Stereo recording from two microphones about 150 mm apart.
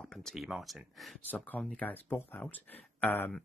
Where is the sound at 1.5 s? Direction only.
10° left (ahead or behind).